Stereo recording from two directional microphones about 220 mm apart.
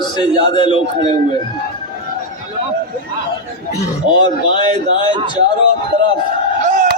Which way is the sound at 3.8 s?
20° left (ahead or behind).